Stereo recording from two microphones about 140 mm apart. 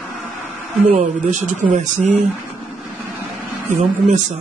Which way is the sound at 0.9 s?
60° right (ahead or behind).